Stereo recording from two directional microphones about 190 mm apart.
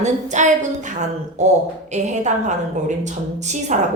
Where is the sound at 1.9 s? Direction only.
40° right (ahead or behind).